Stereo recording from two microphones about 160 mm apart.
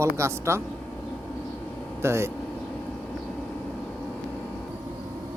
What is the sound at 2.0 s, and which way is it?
Speech, 15° right (ahead or behind).